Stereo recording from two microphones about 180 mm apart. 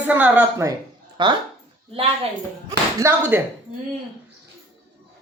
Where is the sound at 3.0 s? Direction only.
15° right (ahead or behind).